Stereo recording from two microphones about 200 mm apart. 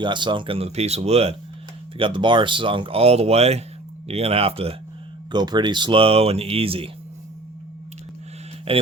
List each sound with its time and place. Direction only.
0.0 s speech: 25° right (ahead or behind)
8.7 s speech: 30° right (ahead or behind)